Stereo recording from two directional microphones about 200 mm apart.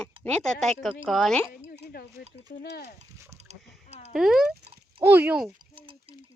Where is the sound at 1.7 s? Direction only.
50° left (ahead or behind).